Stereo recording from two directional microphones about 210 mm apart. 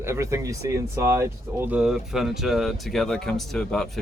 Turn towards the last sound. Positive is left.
turn(degrees=0)  # may be behind; listen again after turning